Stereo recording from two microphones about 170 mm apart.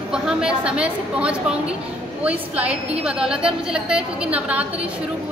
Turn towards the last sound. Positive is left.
turn(degrees=-10)  # may be behind; listen again after turning